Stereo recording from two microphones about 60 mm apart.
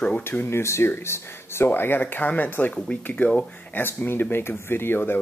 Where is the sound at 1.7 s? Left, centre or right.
Left.